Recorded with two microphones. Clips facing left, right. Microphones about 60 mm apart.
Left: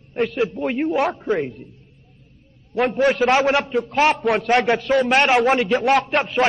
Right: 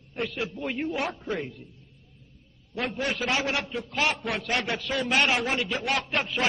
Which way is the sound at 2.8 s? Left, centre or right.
Left.